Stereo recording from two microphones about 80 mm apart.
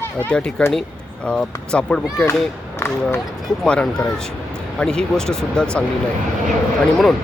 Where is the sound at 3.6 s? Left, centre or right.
Centre.